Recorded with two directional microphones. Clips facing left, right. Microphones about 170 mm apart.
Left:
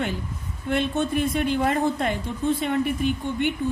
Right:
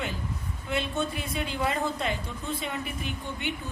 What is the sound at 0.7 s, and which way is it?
A woman's voice, 50° left (ahead or behind).